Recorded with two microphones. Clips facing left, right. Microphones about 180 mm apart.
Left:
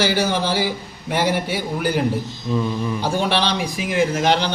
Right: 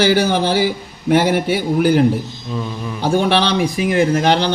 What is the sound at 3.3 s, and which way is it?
Speech, 55° right (ahead or behind).